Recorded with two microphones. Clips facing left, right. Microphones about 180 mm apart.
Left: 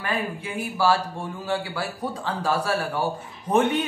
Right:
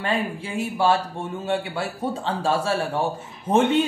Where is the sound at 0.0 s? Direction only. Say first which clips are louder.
Right 3 dB; 25° right (ahead or behind).